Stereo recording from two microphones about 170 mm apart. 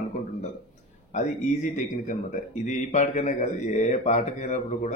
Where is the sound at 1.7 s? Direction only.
45° left (ahead or behind).